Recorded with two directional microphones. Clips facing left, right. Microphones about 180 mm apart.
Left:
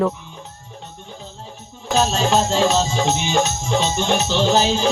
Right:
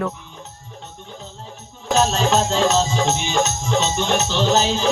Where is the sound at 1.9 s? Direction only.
10° left (ahead or behind).